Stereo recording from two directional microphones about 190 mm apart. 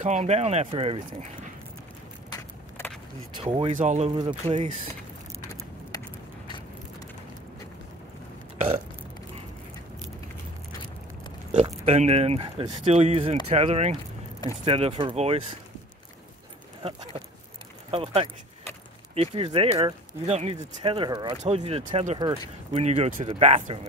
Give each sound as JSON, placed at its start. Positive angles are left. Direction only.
{"t": 0.0, "sound": "speech", "side_deg": -35}
{"t": 3.3, "sound": "speech", "side_deg": -30}
{"t": 5.5, "sound": "a sound", "side_deg": 20}
{"t": 8.5, "sound": "burping", "side_deg": -35}
{"t": 11.6, "sound": "speech", "side_deg": -35}
{"t": 16.8, "sound": "speech", "side_deg": -30}